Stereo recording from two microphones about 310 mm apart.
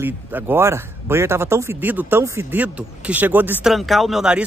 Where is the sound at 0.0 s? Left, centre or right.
Centre.